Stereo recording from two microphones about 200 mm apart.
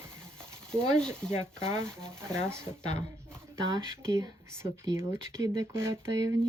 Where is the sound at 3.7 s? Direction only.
15° right (ahead or behind).